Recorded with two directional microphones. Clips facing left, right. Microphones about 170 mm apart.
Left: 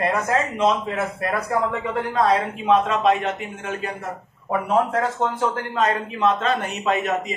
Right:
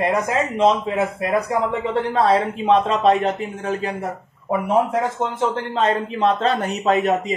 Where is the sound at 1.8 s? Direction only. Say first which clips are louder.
Right 3 dB; 30° right (ahead or behind).